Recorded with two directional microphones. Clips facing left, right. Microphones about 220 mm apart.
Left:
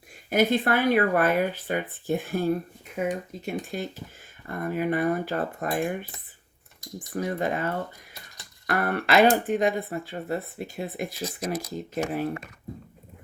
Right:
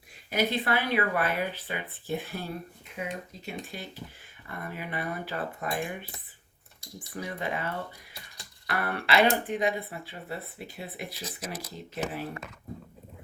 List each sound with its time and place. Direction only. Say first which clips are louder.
0.3 s speech: left 6 dB; 50° left (ahead or behind)
7.1 s speech: left 7 dB; 45° left (ahead or behind)
11.4 s speech: left 9 dB; 5° right (ahead or behind)